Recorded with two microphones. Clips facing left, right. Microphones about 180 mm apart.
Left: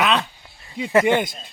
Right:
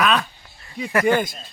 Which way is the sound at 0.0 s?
25° left (ahead or behind).